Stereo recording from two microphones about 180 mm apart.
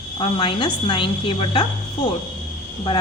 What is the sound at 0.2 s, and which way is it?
A woman's voice, 30° left (ahead or behind).